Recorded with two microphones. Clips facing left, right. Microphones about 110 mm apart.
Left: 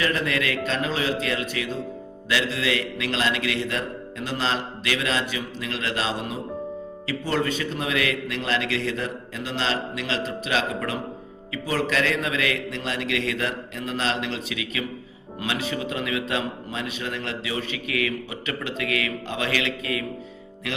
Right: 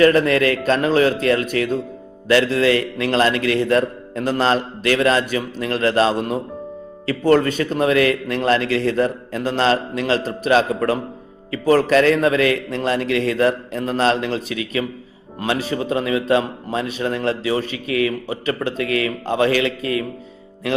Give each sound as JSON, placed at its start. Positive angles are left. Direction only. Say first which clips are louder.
{"t": 0.0, "sound": "a man's voice", "louder": "right 11 dB", "side_deg": -45}